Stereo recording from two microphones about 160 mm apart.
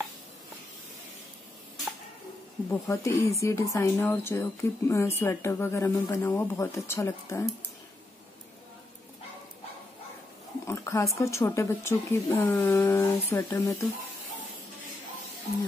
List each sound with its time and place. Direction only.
2.7 s speech: 15° left (ahead or behind)
10.7 s a sound: 15° left (ahead or behind)
11.1 s speech: 20° left (ahead or behind)